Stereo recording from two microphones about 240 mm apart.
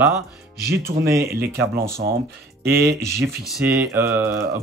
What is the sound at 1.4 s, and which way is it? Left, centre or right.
Speech, right.